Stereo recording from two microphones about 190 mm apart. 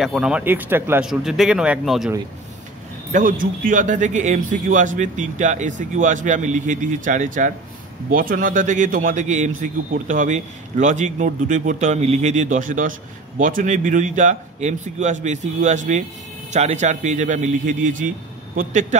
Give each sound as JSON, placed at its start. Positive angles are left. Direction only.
{"t": 0.0, "sound": "speech", "side_deg": -5}
{"t": 3.1, "sound": "a man's voice", "side_deg": -45}